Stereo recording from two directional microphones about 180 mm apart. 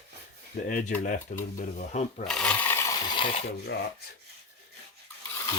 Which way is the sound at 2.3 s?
5° left (ahead or behind).